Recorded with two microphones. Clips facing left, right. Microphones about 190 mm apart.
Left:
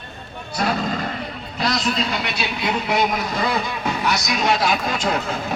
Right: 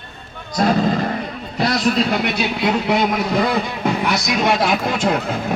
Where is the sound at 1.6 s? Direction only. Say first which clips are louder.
Right 5 dB; 55° right (ahead or behind).